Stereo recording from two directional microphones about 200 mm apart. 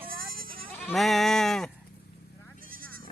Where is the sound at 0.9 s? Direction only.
Centre (ahead or behind).